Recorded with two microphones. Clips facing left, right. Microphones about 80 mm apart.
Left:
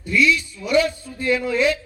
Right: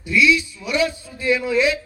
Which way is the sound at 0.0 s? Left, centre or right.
Left.